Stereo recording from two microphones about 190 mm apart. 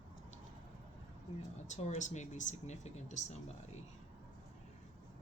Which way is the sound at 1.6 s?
35° left (ahead or behind).